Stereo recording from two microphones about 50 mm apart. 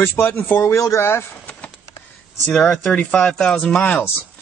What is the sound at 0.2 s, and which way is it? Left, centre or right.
Speech, left.